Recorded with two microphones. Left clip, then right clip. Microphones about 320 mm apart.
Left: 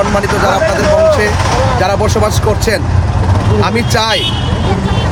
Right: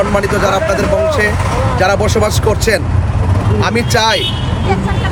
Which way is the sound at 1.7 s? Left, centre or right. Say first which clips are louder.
Even; centre.